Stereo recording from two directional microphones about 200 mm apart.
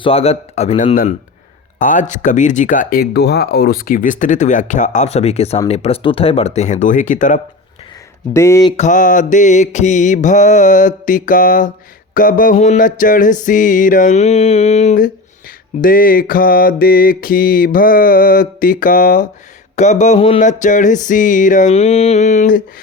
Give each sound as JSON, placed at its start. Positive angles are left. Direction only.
{"t": 0.0, "sound": "a man's voice", "side_deg": 30}
{"t": 8.3, "sound": "speech", "side_deg": 15}
{"t": 8.7, "sound": "speech", "side_deg": 35}
{"t": 15.8, "sound": "mantra", "side_deg": 45}
{"t": 19.7, "sound": "speech", "side_deg": 35}